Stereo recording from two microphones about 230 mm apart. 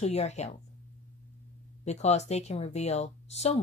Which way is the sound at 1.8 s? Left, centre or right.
Left.